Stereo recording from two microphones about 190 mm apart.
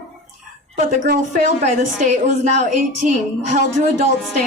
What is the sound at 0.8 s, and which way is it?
A woman's voice, 40° right (ahead or behind).